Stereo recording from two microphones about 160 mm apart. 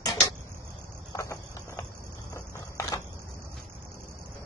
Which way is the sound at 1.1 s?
15° left (ahead or behind).